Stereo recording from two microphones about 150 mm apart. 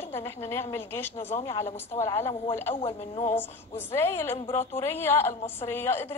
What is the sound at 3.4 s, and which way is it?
A woman's voice, 15° left (ahead or behind).